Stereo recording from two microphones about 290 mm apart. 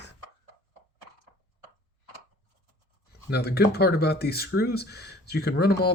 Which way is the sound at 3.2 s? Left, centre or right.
Left.